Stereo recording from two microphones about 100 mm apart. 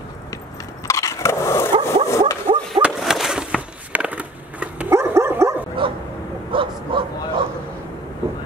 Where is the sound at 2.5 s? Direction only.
60° right (ahead or behind).